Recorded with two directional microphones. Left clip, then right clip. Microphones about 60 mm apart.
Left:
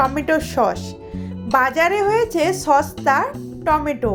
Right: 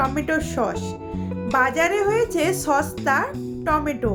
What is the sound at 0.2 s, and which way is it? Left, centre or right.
A child's voice, centre.